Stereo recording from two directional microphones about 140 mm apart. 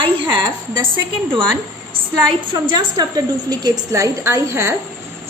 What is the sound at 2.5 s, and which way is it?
A woman's voice, 35° right (ahead or behind).